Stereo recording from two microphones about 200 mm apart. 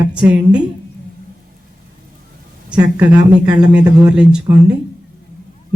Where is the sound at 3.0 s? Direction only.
5° right (ahead or behind).